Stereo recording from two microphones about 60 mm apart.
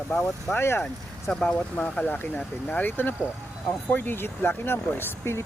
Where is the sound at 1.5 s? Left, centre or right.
Left.